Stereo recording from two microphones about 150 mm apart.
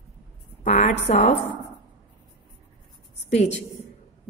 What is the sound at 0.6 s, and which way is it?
Speech, 50° left (ahead or behind).